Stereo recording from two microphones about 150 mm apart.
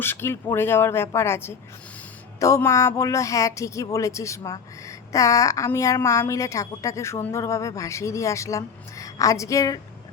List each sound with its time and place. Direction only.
0.0 s speech: 15° left (ahead or behind)